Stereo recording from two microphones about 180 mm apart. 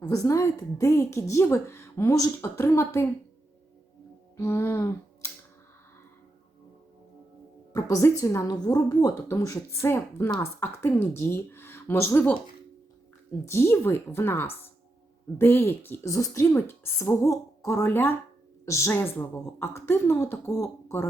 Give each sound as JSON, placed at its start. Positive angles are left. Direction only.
{"t": 0.0, "sound": "a woman's voice", "side_deg": 20}
{"t": 4.4, "sound": "a sound", "side_deg": 15}
{"t": 7.7, "sound": "a woman's voice", "side_deg": 20}
{"t": 13.4, "sound": "a woman's voice", "side_deg": 15}